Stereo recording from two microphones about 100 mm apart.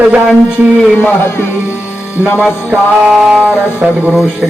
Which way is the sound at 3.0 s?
5° right (ahead or behind).